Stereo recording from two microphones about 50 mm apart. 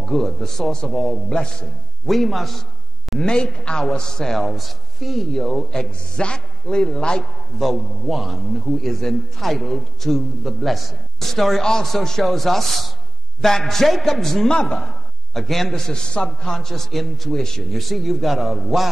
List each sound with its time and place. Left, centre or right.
0.0 s a man's voice: centre
2.0 s a man's voice: centre
3.2 s a man's voice: centre
7.5 s a man's voice: centre
15.3 s a man's voice: centre